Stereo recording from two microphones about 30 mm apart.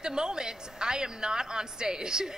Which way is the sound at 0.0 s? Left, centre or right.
Right.